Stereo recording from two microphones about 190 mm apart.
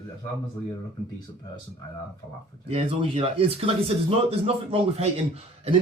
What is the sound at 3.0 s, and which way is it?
Speech, 30° right (ahead or behind).